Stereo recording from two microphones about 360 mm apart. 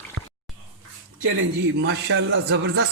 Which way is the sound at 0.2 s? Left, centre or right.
Right.